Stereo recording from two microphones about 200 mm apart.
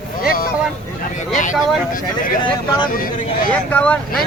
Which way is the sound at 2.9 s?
45° left (ahead or behind).